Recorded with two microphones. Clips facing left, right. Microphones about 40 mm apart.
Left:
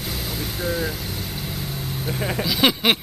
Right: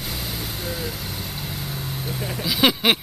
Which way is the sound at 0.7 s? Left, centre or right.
Centre.